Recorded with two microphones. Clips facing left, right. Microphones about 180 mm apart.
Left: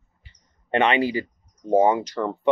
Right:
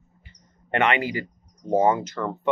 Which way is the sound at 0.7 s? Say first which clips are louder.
Left 3 dB; 15° left (ahead or behind).